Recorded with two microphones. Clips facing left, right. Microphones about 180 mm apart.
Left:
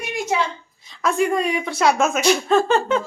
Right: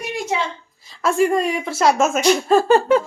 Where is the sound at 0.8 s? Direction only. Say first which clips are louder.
Right 3 dB; centre (ahead or behind).